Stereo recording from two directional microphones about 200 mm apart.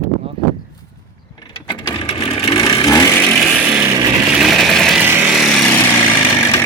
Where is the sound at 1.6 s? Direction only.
30° left (ahead or behind).